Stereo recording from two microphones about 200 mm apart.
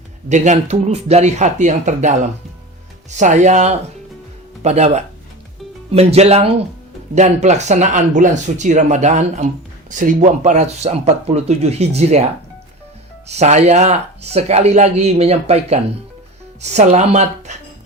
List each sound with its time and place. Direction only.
0.3 s speech: 35° right (ahead or behind)
6.1 s speech: 30° right (ahead or behind)